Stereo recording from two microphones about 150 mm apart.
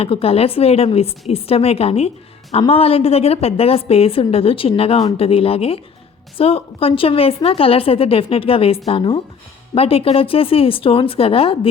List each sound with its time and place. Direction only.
0.0 s a woman's voice: 40° left (ahead or behind)